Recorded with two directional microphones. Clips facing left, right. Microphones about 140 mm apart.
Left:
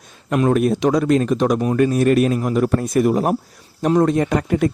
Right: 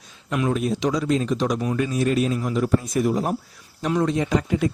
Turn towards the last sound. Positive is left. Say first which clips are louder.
# left 4 dB
turn(degrees=55)  # may be behind; listen again after turning